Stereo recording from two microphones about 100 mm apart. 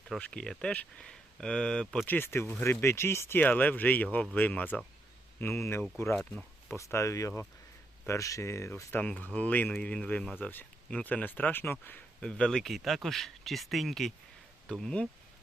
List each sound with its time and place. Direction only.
0.2 s speech: 10° left (ahead or behind)
2.0 s speech: 20° left (ahead or behind); by 15.0 s 5° left (ahead or behind)